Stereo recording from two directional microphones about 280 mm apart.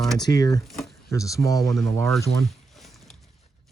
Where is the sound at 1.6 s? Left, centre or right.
Centre.